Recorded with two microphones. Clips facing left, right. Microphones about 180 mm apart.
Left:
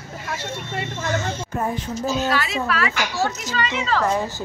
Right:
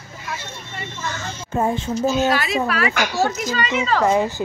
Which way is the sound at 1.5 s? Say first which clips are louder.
Right 7 dB; 25° right (ahead or behind).